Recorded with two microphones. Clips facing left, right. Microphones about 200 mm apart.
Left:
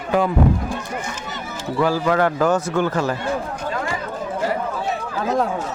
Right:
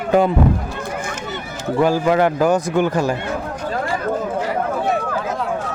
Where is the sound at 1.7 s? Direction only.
15° right (ahead or behind).